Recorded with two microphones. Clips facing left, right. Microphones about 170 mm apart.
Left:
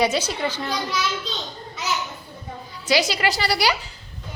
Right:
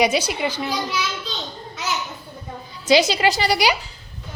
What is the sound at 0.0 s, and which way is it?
Speech, 10° right (ahead or behind).